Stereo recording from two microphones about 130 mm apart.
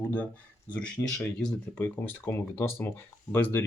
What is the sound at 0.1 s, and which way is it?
Speech, 10° left (ahead or behind).